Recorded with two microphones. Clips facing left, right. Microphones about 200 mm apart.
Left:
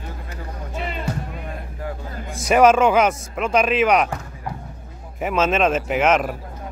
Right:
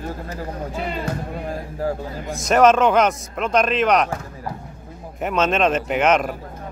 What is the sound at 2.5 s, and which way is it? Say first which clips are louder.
Speech: even; 10° left (ahead or behind).